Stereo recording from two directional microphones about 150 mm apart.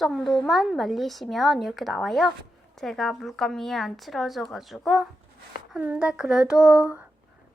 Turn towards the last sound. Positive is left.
turn(degrees=-10)  # may be behind; listen again after turning